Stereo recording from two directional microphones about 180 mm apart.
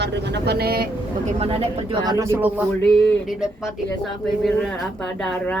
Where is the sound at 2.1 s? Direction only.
15° right (ahead or behind).